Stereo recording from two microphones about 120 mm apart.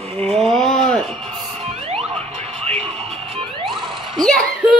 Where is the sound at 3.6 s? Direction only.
5° left (ahead or behind).